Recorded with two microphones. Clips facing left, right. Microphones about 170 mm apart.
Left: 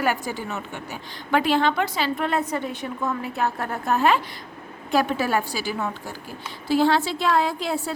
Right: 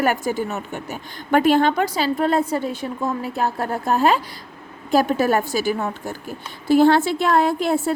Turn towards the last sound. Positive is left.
turn(degrees=-55)  # may be behind; listen again after turning